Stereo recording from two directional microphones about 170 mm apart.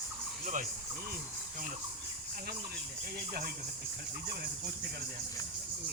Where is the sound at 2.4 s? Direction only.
65° right (ahead or behind).